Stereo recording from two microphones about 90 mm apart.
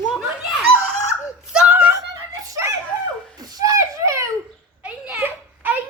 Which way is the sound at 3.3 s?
40° right (ahead or behind).